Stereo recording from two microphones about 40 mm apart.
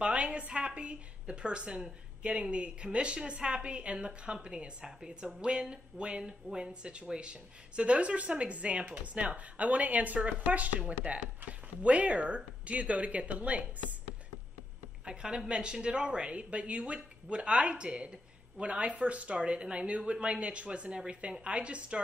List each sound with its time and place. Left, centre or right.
0.0 s a woman's voice: right
15.0 s a woman's voice: right